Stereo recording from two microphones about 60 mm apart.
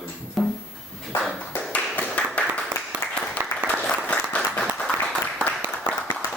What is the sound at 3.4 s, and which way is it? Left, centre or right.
Applause, right.